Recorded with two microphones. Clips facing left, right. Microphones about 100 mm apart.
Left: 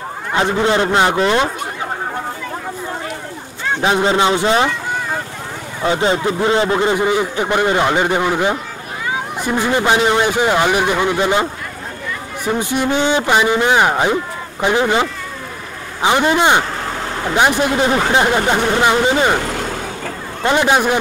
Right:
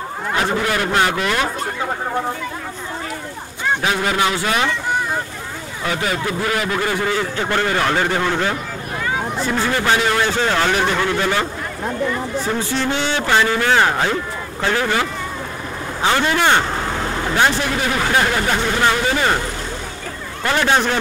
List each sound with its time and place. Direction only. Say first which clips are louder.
0.3 s a man's voice: left 4 dB; 25° left (ahead or behind)
3.8 s a man's voice: left 7 dB; 25° left (ahead or behind)
5.9 s a man's voice: left 6 dB; 25° left (ahead or behind)
20.4 s speech: left 3 dB; 15° left (ahead or behind)